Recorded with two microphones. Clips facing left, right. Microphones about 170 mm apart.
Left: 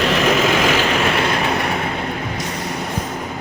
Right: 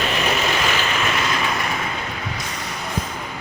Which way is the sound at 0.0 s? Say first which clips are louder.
Left 6 dB; 90° left.